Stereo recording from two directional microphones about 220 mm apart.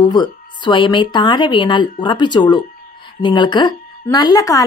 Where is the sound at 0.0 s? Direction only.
20° left (ahead or behind).